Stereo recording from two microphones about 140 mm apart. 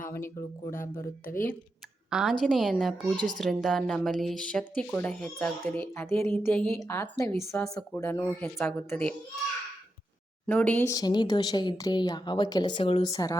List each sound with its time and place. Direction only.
0.1 s speech: 20° left (ahead or behind)
2.0 s a woman's voice: 5° right (ahead or behind); by 9.1 s 10° left (ahead or behind)
10.4 s speech: 10° left (ahead or behind)
10.8 s speech: 30° left (ahead or behind)
13.1 s speech: 25° left (ahead or behind)